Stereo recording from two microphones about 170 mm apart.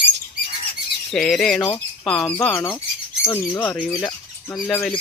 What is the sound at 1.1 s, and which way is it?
Speech, centre (ahead or behind).